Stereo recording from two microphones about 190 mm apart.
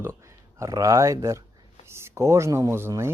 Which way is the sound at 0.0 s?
15° right (ahead or behind).